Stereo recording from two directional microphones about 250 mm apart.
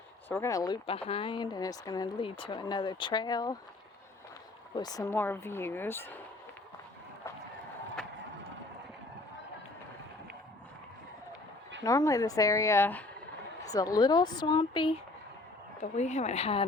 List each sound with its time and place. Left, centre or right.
0.3 s speech: centre
4.7 s speech: centre
11.8 s speech: centre